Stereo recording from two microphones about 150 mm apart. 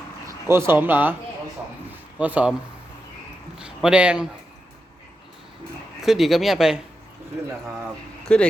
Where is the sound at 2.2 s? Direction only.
10° right (ahead or behind).